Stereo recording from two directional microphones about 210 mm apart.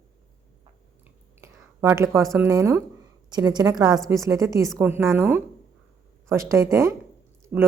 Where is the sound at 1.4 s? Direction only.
10° right (ahead or behind).